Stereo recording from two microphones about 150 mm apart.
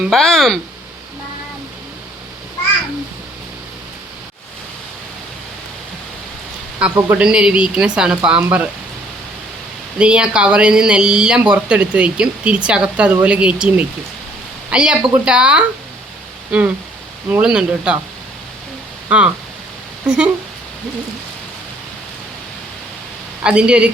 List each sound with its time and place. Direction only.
0.0 s speech: centre (ahead or behind)
6.7 s speech: 10° right (ahead or behind)
10.0 s speech: 5° right (ahead or behind)
16.5 s a sound: 10° right (ahead or behind)
17.2 s speech: 10° right (ahead or behind)
19.0 s speech: 10° right (ahead or behind)
23.4 s speech: 5° right (ahead or behind)